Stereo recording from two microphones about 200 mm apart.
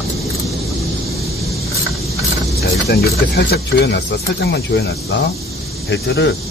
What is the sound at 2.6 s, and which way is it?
Speech, 50° left (ahead or behind).